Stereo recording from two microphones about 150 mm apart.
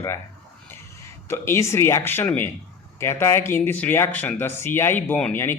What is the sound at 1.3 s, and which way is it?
Speech, 15° left (ahead or behind).